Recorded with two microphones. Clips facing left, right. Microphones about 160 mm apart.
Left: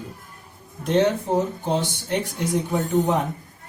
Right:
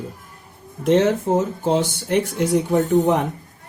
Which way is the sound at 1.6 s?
75° right (ahead or behind).